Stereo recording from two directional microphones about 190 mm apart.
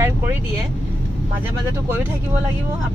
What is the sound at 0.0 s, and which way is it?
Vehicle, 10° right (ahead or behind).